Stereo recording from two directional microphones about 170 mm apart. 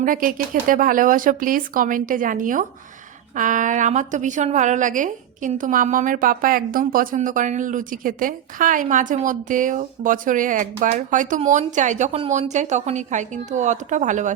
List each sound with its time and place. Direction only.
0.0 s a woman's voice: 55° right (ahead or behind)